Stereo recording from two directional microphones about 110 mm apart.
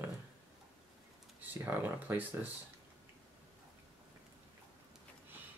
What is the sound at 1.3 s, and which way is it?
Speech, 15° right (ahead or behind).